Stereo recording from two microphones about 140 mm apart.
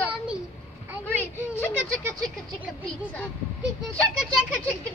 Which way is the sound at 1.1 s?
15° left (ahead or behind).